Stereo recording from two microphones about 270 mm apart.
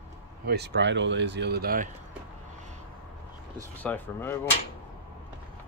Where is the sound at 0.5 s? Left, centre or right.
Right.